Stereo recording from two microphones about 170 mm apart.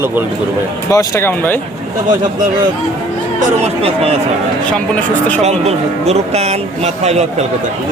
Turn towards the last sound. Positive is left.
turn(degrees=-40)  # may be behind; listen again after turning